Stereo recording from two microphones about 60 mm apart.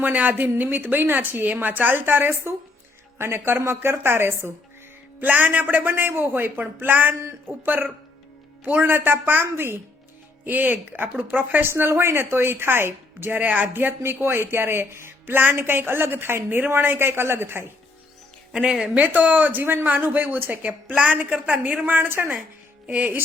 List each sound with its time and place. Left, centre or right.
0.0 s a woman's voice: right
5.2 s a woman's voice: right
18.5 s a woman's voice: centre
19.2 s speech: right
20.6 s a woman's voice: right